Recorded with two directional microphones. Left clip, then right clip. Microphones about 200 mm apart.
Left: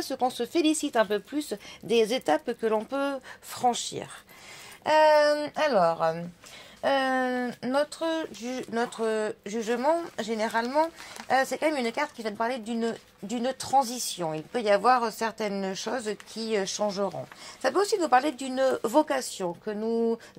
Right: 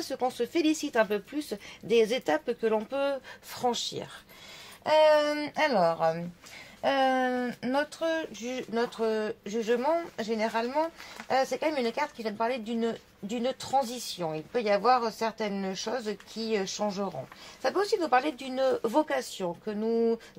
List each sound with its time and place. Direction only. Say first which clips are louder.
0.0 s speech: left 2 dB; 30° left (ahead or behind)